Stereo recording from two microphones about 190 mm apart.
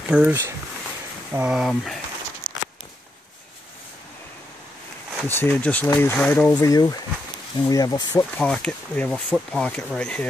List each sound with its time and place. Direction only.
0.1 s speech: 10° right (ahead or behind)
2.4 s a sound: 25° right (ahead or behind)
5.2 s speech: 10° left (ahead or behind)
6.5 s speech: 20° left (ahead or behind)
8.4 s speech: 5° left (ahead or behind)